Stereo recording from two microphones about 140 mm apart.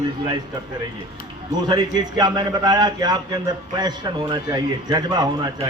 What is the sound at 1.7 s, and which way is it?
A man's voice, 30° right (ahead or behind).